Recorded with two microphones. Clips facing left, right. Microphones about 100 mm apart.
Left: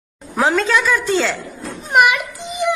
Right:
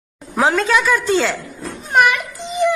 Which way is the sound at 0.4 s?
15° right (ahead or behind).